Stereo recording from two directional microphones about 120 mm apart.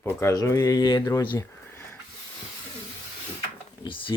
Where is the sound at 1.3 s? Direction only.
25° left (ahead or behind).